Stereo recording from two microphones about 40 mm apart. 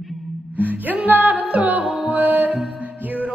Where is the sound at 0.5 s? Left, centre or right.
Right.